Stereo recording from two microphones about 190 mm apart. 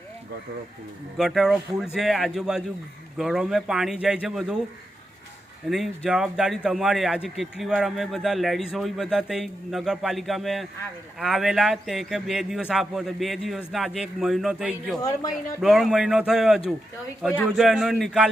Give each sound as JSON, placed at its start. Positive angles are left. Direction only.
{"t": 1.1, "sound": "a man's voice", "side_deg": 0}
{"t": 5.6, "sound": "a man's voice", "side_deg": 0}
{"t": 15.0, "sound": "speech", "side_deg": 20}
{"t": 15.6, "sound": "a man's voice", "side_deg": 0}